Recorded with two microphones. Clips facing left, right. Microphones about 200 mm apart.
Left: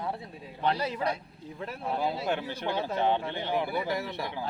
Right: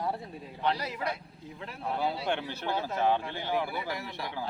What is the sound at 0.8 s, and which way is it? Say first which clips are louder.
Speech: left 5 dB; 30° left (ahead or behind).